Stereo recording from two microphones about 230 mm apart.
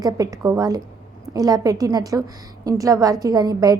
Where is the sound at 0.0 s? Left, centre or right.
Centre.